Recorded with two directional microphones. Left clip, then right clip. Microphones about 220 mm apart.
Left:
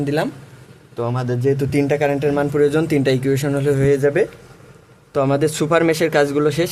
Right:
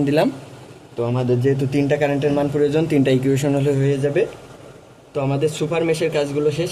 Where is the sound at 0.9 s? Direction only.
40° left (ahead or behind).